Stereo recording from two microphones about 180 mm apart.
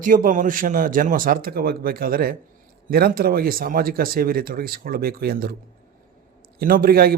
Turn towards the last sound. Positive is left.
turn(degrees=-55)  # may be behind; listen again after turning